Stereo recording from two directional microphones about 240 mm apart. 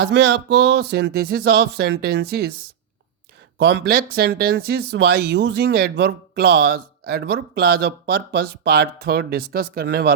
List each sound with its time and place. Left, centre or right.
0.0 s speech: right
3.6 s speech: right